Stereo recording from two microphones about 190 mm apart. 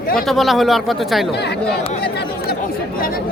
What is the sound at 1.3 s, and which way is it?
Speech, 60° left (ahead or behind).